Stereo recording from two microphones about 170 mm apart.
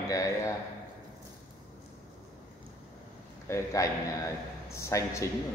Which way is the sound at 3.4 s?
15° left (ahead or behind).